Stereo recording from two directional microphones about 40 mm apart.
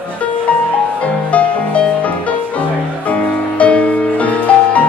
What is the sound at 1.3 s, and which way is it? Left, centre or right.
Music, left.